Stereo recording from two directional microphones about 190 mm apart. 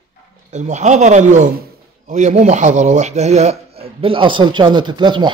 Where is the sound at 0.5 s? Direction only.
40° right (ahead or behind).